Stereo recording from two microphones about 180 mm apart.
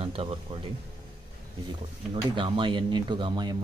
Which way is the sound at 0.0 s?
30° right (ahead or behind).